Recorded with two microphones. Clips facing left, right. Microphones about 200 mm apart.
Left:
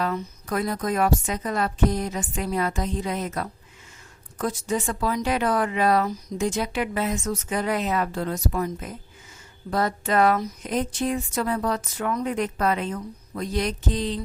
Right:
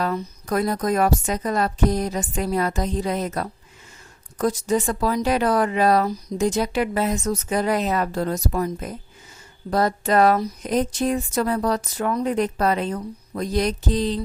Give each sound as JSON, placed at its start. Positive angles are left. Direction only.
{"t": 0.0, "sound": "speech", "side_deg": -40}